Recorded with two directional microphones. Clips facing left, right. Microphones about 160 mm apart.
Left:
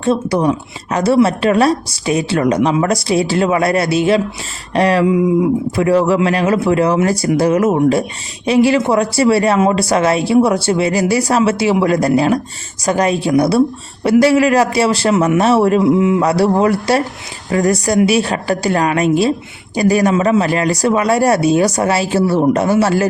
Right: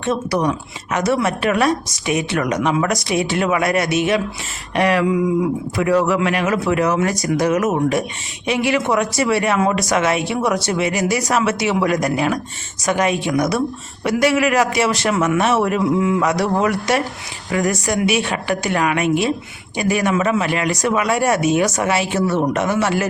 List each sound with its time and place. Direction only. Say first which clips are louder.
0.0 s speech: left 5 dB; 30° left (ahead or behind)